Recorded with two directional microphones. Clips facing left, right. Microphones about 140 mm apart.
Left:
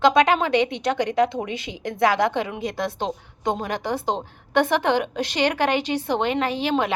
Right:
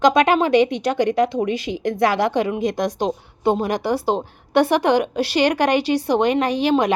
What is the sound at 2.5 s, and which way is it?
Speech, 15° right (ahead or behind).